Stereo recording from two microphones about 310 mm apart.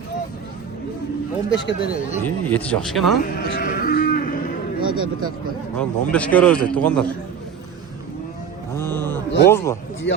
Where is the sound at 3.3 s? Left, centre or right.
Left.